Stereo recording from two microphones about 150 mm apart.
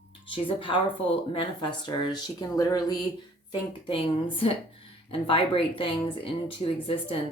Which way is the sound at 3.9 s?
35° left (ahead or behind).